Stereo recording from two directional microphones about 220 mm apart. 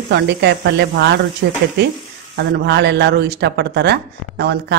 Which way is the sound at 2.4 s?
50° right (ahead or behind).